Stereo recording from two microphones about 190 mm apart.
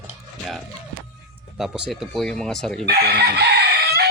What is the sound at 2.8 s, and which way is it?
Chicken, 55° right (ahead or behind).